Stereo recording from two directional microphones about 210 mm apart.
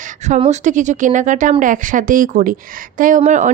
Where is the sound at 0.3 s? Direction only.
35° right (ahead or behind).